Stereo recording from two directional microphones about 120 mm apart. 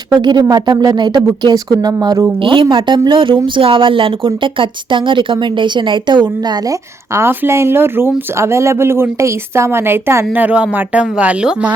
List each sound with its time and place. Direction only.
0.2 s a woman's voice: 40° right (ahead or behind)
2.4 s a woman's voice: 45° right (ahead or behind); by 11.7 s 10° right (ahead or behind)